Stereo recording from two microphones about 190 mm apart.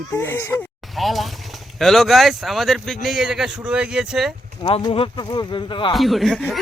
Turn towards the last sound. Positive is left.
turn(degrees=0)  # may be behind; listen again after turning